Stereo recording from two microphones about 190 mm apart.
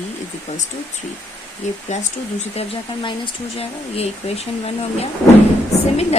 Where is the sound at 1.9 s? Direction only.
35° left (ahead or behind).